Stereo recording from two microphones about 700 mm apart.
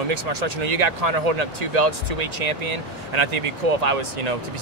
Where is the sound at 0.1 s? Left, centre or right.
Right.